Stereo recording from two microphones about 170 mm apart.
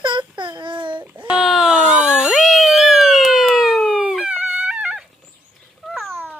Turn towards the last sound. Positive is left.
turn(degrees=5)  # may be behind; listen again after turning